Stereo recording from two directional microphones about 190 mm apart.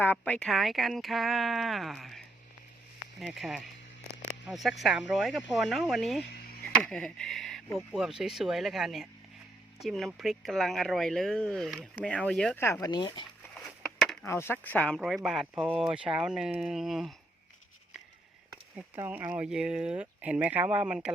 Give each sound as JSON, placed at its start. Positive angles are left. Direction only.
{"t": 0.0, "sound": "speech", "side_deg": 10}
{"t": 12.8, "sound": "speech", "side_deg": 25}
{"t": 14.0, "sound": "a sound", "side_deg": 0}
{"t": 14.3, "sound": "speech", "side_deg": 15}
{"t": 18.5, "sound": "speech", "side_deg": -10}